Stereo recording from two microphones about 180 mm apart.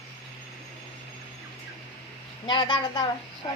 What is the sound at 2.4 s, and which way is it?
Speech, 25° left (ahead or behind).